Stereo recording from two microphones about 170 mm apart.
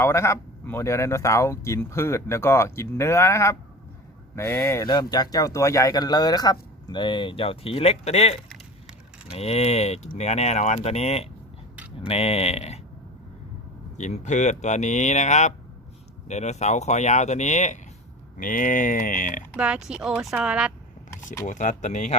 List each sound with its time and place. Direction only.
0.0 s speech: 15° left (ahead or behind); by 8.4 s 40° left (ahead or behind)
8.4 s a sound: centre (ahead or behind)
9.3 s speech: 35° left (ahead or behind)
13.9 s speech: 45° left (ahead or behind)
19.5 s speech: 5° right (ahead or behind)
21.4 s speech: 45° left (ahead or behind)